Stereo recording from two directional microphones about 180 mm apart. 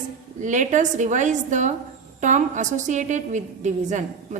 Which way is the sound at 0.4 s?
45° right (ahead or behind).